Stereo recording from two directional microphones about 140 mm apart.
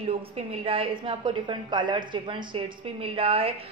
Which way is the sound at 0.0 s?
45° right (ahead or behind).